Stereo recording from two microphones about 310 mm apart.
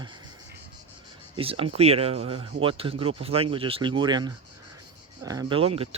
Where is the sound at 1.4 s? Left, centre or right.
Centre.